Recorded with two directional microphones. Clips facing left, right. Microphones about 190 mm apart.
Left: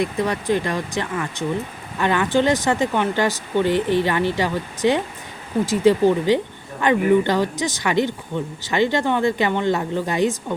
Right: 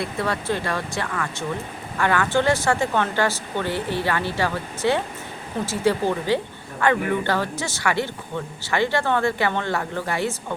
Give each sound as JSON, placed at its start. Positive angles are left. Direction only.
{"t": 0.0, "sound": "speech", "side_deg": 15}